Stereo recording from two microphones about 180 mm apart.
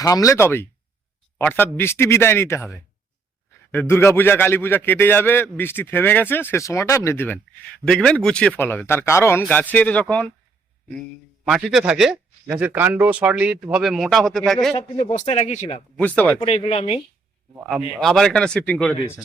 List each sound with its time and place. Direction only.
0.0 s a man's voice: 20° left (ahead or behind)
11.4 s speech: 5° right (ahead or behind)
14.8 s speech: 30° left (ahead or behind)
16.0 s a man's voice: 10° left (ahead or behind)
16.4 s speech: 30° left (ahead or behind)
17.7 s speech: centre (ahead or behind)